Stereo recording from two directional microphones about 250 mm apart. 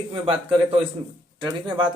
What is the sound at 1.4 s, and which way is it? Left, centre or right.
Speech, centre.